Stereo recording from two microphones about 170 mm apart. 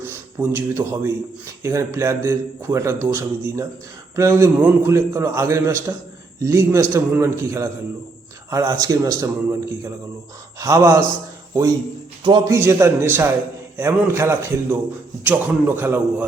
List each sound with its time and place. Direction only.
0.0 s a man's voice: 15° right (ahead or behind)
10.6 s speech: 20° right (ahead or behind)
12.2 s speech: 25° right (ahead or behind)
12.5 s a man's voice: 15° right (ahead or behind)